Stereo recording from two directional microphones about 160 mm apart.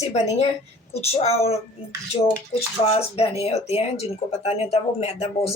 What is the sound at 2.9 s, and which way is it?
Speech, 40° left (ahead or behind).